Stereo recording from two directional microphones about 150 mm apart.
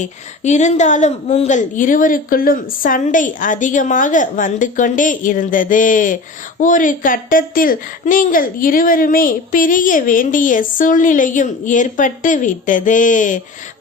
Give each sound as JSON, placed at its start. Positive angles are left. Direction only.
{"t": 0.0, "sound": "a woman's voice", "side_deg": 50}